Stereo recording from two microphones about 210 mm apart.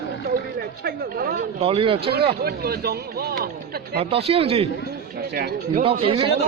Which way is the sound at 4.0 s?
30° right (ahead or behind).